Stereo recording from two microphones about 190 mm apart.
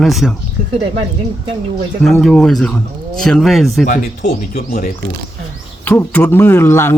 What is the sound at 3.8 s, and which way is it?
Speech, 45° left (ahead or behind).